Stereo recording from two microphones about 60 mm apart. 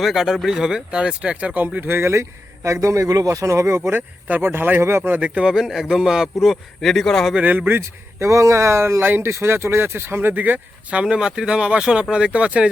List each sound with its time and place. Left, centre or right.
0.0 s speech: centre; by 3.9 s right
3.9 s speech: right
4.8 s speech: right
5.0 s speech: right
5.5 s speech: centre
6.4 s speech: centre
7.4 s speech: right
7.8 s speech: right
10.9 s speech: centre